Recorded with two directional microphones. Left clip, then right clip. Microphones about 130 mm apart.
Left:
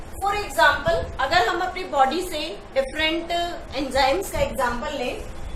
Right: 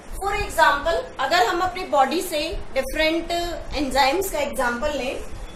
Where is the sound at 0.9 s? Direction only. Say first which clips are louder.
Even; 20° right (ahead or behind).